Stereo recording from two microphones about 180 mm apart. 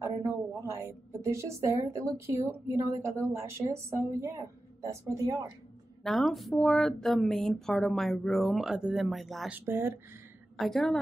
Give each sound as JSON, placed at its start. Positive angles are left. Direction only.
{"t": 0.0, "sound": "a woman's voice", "side_deg": -15}
{"t": 6.0, "sound": "speech", "side_deg": 0}
{"t": 9.7, "sound": "a woman's voice", "side_deg": -15}
{"t": 10.6, "sound": "speech", "side_deg": 0}